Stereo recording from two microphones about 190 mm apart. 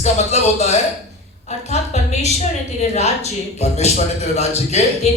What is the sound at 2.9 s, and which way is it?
A man's voice, 35° left (ahead or behind).